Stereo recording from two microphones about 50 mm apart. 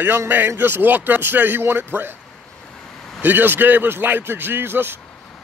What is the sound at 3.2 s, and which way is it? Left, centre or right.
A man's voice, right.